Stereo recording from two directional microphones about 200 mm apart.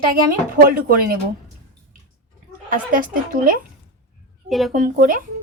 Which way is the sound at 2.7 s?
45° right (ahead or behind).